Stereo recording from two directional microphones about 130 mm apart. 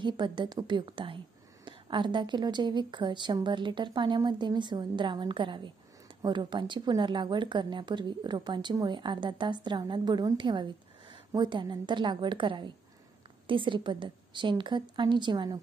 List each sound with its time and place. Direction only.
0.0 s a woman's voice: 35° right (ahead or behind)